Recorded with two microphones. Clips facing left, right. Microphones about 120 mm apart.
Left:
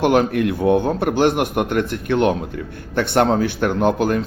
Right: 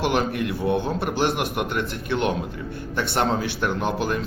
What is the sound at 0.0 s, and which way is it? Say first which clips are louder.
A man's voice: left 7 dB; 55° left (ahead or behind).